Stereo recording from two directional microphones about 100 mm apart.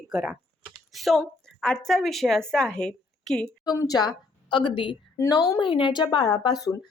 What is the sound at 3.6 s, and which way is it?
A woman's voice, 40° left (ahead or behind).